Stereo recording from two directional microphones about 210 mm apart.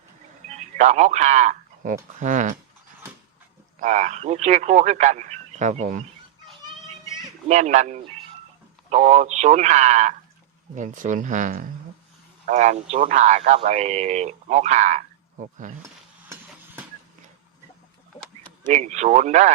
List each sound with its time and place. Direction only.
0.5 s speech: 35° right (ahead or behind)
3.8 s speech: 35° right (ahead or behind)
7.4 s speech: 35° right (ahead or behind)
18.4 s speech: 35° right (ahead or behind)